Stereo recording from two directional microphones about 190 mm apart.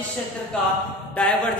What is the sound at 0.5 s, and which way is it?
Speech, 5° left (ahead or behind).